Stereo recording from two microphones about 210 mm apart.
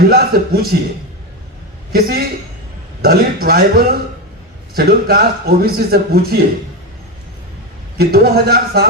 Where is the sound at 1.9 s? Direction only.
45° right (ahead or behind).